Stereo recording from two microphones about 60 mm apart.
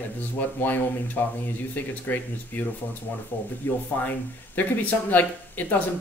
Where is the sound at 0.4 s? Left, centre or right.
Left.